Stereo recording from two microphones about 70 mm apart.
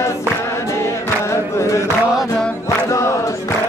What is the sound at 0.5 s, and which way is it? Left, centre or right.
Chant, left.